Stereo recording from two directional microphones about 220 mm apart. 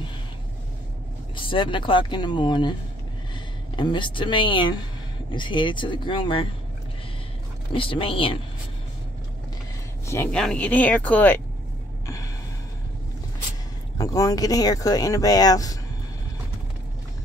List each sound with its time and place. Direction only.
1.3 s speech: 20° left (ahead or behind)
3.7 s speech: 20° left (ahead or behind)
7.7 s speech: 25° left (ahead or behind)
10.0 s speech: 10° left (ahead or behind)
13.9 s speech: 15° left (ahead or behind)